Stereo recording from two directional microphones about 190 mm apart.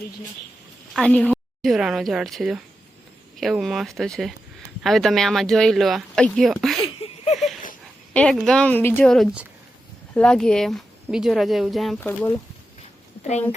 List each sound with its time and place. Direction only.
0.9 s speech: 5° left (ahead or behind)
6.8 s a sound: 30° left (ahead or behind)
8.1 s speech: 5° left (ahead or behind)